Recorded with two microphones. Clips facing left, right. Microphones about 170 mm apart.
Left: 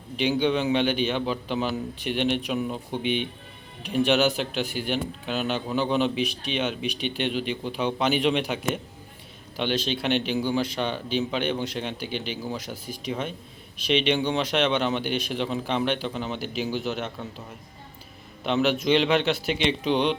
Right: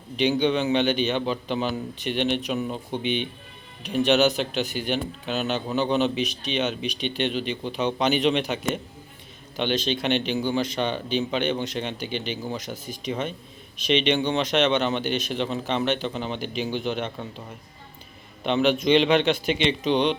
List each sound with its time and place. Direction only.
0.2 s a man's voice: 5° left (ahead or behind)
18.4 s a man's voice: centre (ahead or behind)